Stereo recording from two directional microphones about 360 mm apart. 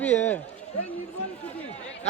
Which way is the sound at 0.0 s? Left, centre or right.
Centre.